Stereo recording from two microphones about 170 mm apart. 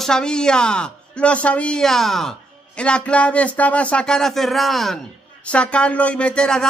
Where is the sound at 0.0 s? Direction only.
5° left (ahead or behind).